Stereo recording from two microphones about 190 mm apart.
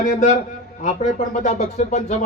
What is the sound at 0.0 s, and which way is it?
A man's voice, 40° left (ahead or behind).